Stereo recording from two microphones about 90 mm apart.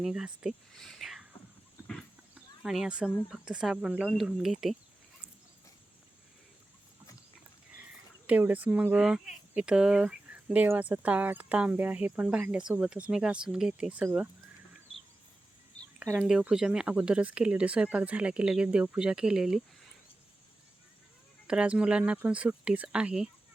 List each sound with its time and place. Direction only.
0.0 s speech: 5° right (ahead or behind)
0.8 s a sound: centre (ahead or behind)
2.3 s chicken: 5° right (ahead or behind)
3.2 s speech: 10° right (ahead or behind)
8.3 s speech: 20° right (ahead or behind)
9.0 s speech: 5° right (ahead or behind)
16.2 s speech: 5° right (ahead or behind)
21.4 s speech: 10° right (ahead or behind)